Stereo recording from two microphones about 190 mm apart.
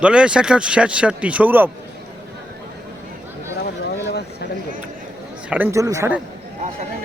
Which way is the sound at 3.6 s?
60° left (ahead or behind).